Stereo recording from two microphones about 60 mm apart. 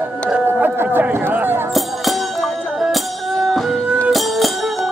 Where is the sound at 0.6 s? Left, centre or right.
Right.